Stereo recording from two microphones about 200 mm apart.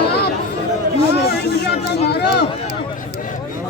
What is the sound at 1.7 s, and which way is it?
Speech, 55° left (ahead or behind).